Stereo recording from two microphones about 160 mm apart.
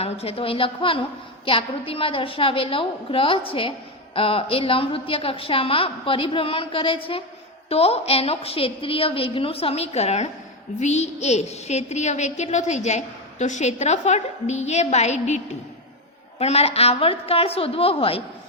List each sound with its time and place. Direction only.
0.0 s a woman's voice: 40° left (ahead or behind)
16.4 s a woman's voice: 40° left (ahead or behind)